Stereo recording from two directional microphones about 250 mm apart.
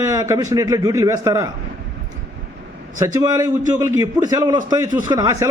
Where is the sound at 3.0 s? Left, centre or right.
Centre.